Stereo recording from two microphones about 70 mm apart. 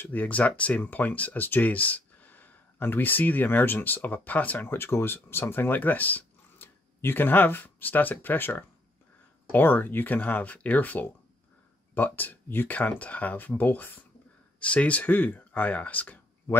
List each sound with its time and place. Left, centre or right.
0.0 s speech: left